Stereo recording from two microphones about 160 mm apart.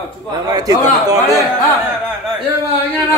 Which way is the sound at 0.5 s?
25° right (ahead or behind).